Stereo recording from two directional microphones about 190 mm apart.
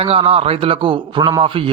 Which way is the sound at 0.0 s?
30° right (ahead or behind).